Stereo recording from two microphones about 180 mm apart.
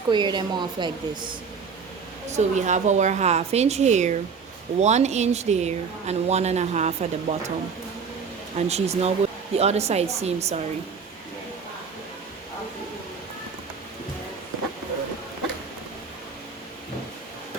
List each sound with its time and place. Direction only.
0.1 s speech: 25° right (ahead or behind)
2.3 s speech: 40° right (ahead or behind)
8.5 s speech: 35° right (ahead or behind)